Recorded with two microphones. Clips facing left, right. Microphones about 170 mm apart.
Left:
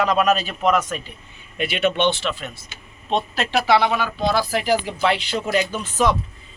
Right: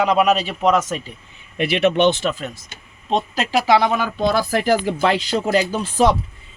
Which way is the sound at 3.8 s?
45° right (ahead or behind).